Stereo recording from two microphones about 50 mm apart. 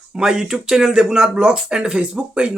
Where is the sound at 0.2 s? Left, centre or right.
Centre.